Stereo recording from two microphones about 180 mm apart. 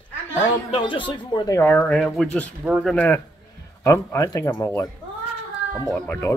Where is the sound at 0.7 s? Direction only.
25° left (ahead or behind).